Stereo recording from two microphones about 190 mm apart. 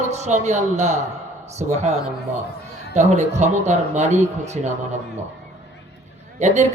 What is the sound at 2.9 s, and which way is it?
Speech, 40° right (ahead or behind).